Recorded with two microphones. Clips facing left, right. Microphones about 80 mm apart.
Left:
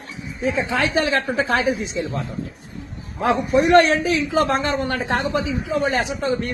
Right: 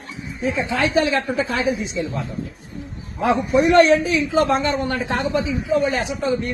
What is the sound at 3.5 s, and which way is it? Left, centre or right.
A man's voice, left.